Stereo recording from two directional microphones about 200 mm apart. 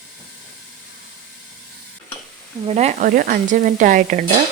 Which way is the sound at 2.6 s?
30° right (ahead or behind).